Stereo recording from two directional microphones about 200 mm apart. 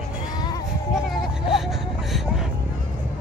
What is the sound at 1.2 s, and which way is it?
Whimper, centre (ahead or behind).